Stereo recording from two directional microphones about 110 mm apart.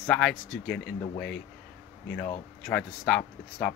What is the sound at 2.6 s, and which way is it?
Speech, 10° left (ahead or behind).